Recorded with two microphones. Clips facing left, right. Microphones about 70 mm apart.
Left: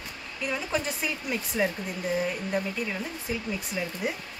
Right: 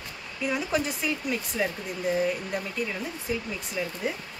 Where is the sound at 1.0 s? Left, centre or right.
Centre.